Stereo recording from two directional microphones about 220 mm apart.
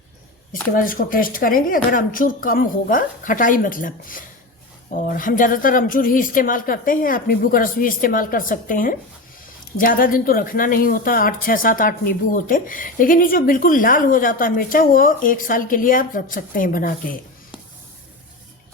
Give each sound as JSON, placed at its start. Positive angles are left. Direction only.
{"t": 0.5, "sound": "speech", "side_deg": 40}